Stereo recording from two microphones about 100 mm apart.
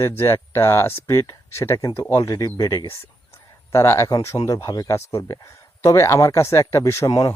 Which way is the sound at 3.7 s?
25° left (ahead or behind).